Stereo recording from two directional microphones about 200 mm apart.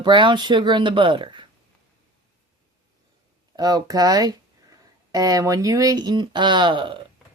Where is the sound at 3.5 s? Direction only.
20° right (ahead or behind).